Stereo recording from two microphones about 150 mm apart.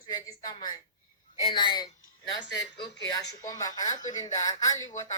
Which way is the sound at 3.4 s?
25° left (ahead or behind).